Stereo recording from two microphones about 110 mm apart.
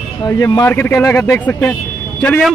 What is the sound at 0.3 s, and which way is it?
Speech, 35° left (ahead or behind).